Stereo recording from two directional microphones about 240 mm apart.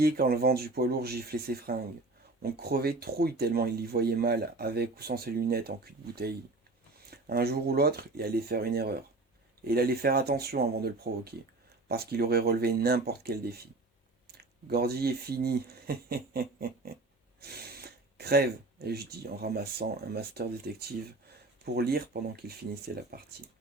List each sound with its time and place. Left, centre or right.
0.0 s speech: right